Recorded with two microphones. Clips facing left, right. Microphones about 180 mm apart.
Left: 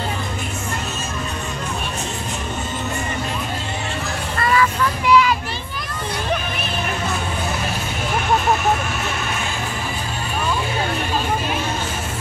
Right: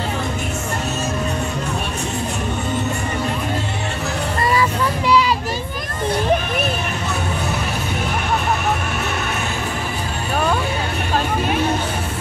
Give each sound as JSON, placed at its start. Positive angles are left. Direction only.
{"t": 5.0, "sound": "children playing", "side_deg": -35}